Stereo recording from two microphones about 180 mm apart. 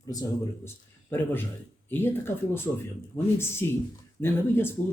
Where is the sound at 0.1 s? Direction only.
20° left (ahead or behind).